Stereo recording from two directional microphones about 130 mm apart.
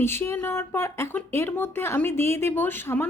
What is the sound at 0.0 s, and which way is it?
A woman's voice, 20° left (ahead or behind).